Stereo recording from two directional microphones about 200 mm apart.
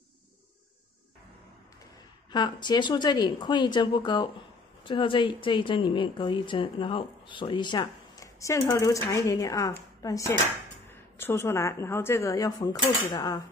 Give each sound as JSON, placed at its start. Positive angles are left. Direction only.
{"t": 2.3, "sound": "a woman's voice", "side_deg": 20}